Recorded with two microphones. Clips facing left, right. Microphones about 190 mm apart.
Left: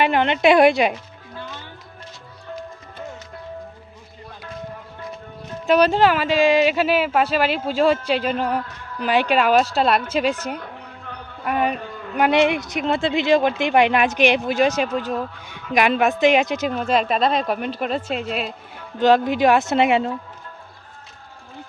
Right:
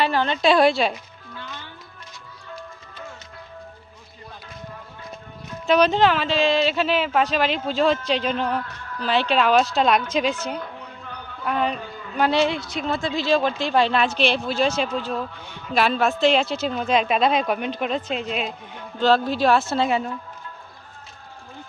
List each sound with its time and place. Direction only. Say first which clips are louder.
0.0 s a woman's voice: left 3 dB; 20° left (ahead or behind)
5.7 s a woman's voice: left 2 dB; 10° left (ahead or behind)
18.9 s a woman's voice: left 3 dB; 15° left (ahead or behind)